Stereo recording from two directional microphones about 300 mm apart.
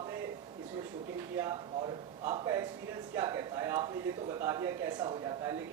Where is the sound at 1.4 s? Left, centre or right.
Centre.